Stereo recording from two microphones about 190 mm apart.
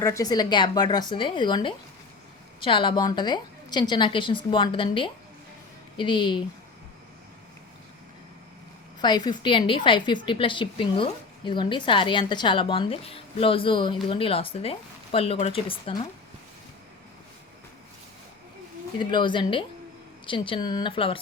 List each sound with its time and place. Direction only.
0.0 s a woman's voice: 15° left (ahead or behind)
9.0 s a woman's voice: 20° left (ahead or behind)
18.9 s a woman's voice: 25° left (ahead or behind)